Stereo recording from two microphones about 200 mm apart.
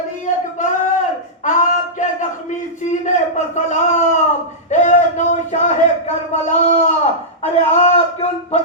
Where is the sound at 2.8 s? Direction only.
35° left (ahead or behind).